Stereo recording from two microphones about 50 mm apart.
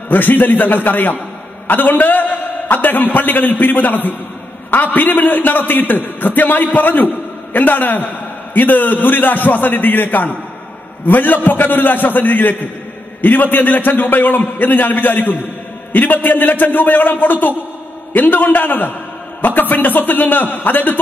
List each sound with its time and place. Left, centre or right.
0.1 s a man's voice: left